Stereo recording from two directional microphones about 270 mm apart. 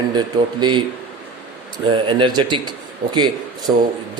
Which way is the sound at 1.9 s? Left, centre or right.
Centre.